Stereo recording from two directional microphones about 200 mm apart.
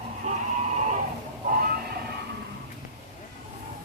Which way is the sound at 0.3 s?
35° right (ahead or behind).